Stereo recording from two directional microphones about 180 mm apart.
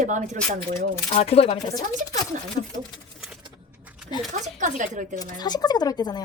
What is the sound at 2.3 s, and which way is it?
Speech, 45° right (ahead or behind).